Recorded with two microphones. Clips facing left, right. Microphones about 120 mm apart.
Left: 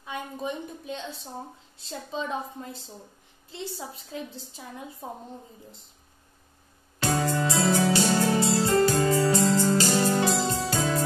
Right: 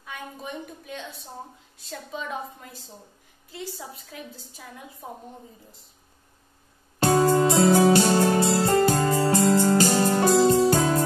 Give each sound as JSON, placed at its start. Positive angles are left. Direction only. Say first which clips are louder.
{"t": 0.0, "sound": "a woman's voice", "louder": "left 4 dB", "side_deg": 25}
{"t": 7.0, "sound": "music", "louder": "right 7 dB", "side_deg": -45}